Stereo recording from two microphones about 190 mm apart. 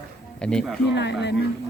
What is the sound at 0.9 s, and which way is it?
Speech, 65° left (ahead or behind).